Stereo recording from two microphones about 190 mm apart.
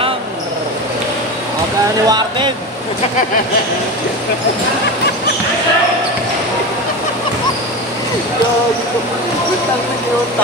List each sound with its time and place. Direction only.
2.0 s speech: 25° right (ahead or behind)